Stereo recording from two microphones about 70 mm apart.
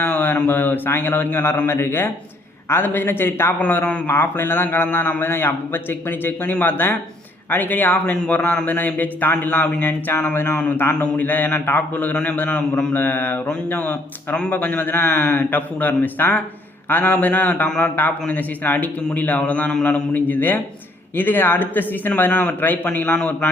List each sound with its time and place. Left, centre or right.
0.0 s a man's voice: left
3.6 s a man's voice: left
12.9 s speech: left
23.1 s a man's voice: centre